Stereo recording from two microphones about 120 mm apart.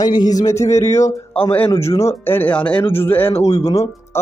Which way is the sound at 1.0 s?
55° left (ahead or behind).